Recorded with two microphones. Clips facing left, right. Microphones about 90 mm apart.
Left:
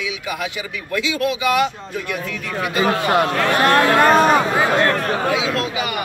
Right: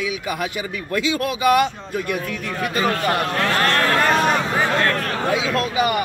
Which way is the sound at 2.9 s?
20° left (ahead or behind).